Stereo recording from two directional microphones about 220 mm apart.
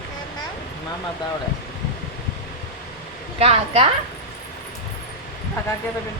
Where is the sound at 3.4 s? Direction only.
25° right (ahead or behind).